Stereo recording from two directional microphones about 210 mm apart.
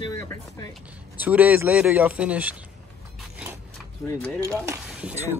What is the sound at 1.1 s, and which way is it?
Speech, 10° right (ahead or behind).